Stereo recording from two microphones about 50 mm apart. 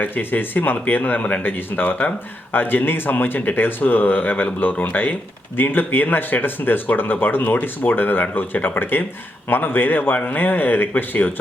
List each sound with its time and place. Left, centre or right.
0.0 s speech: left